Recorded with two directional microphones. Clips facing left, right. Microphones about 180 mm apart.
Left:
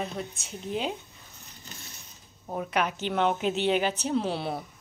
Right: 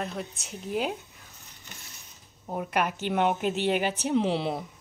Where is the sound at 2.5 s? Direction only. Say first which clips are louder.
Even; 10° right (ahead or behind).